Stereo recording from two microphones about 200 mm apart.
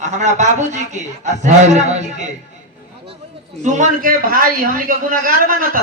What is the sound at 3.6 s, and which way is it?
A man's voice, 35° right (ahead or behind).